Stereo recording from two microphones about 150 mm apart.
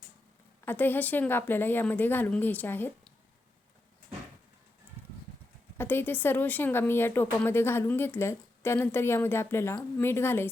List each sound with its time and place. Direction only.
0.6 s speech: 15° left (ahead or behind)
5.7 s speech: 15° left (ahead or behind)